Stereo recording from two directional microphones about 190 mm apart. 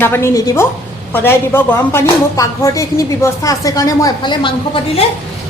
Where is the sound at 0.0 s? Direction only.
15° left (ahead or behind).